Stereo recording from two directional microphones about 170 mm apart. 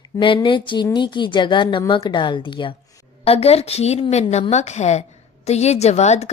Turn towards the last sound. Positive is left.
turn(degrees=40)  # may be behind; listen again after turning